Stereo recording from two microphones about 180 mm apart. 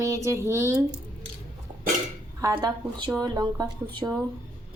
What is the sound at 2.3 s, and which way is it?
A woman's voice, 20° right (ahead or behind).